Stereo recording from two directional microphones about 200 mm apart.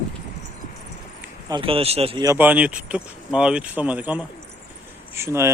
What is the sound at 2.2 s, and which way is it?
Speech, 10° right (ahead or behind).